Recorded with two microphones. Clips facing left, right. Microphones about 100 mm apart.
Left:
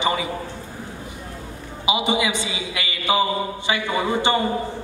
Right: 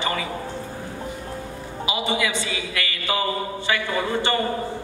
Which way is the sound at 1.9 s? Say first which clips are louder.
Left 3 dB; 20° left (ahead or behind).